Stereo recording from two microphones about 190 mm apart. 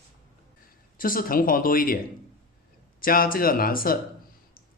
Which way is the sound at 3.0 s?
50° left (ahead or behind).